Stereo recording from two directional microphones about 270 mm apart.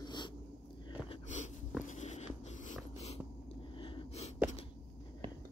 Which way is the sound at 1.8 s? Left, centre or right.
Left.